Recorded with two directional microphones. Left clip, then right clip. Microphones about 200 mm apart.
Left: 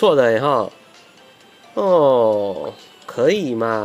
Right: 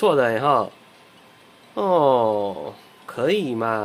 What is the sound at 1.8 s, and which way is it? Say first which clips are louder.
Speech: left 4 dB; 15° left (ahead or behind).